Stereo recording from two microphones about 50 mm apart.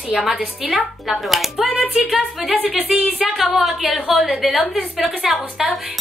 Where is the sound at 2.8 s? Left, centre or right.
Right.